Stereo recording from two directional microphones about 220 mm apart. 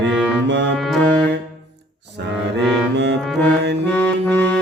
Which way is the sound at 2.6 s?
Centre (ahead or behind).